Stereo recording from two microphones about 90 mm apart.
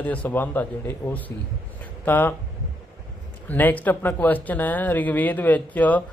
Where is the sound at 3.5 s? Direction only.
20° left (ahead or behind).